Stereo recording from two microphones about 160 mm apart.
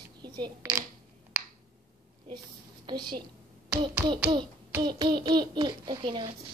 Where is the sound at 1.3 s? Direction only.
10° right (ahead or behind).